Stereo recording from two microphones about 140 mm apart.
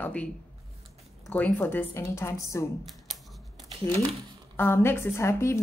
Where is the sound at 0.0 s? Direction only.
10° left (ahead or behind).